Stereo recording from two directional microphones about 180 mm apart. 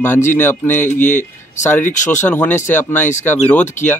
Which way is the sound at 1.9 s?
45° left (ahead or behind).